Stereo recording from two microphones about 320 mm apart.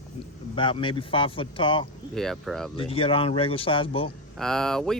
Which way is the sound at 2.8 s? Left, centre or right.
Centre.